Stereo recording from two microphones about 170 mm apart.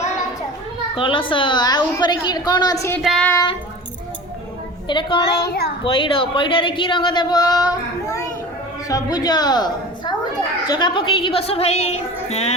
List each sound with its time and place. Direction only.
0.9 s a child's voice: 30° left (ahead or behind)
3.0 s child singing: centre (ahead or behind)
3.3 s a child's voice: 25° left (ahead or behind)
4.9 s a child's voice: 25° left (ahead or behind)
5.5 s speech: 70° left (ahead or behind)
5.8 s a child's voice: 30° left (ahead or behind)